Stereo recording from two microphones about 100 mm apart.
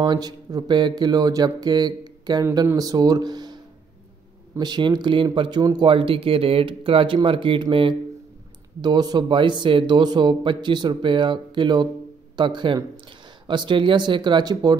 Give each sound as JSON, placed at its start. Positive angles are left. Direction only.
{"t": 0.0, "sound": "speech", "side_deg": -45}
{"t": 4.6, "sound": "speech", "side_deg": -45}
{"t": 8.8, "sound": "speech", "side_deg": -45}